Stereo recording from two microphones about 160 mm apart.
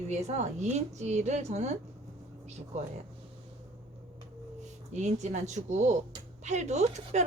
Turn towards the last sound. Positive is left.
turn(degrees=-45)  # may be behind; listen again after turning